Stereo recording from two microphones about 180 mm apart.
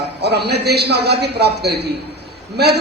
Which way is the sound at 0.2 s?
65° right (ahead or behind).